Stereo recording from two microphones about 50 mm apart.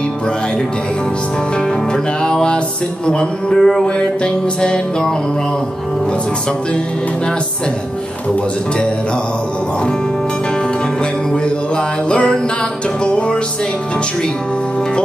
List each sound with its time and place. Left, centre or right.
2.2 s music: centre
11.7 s music: left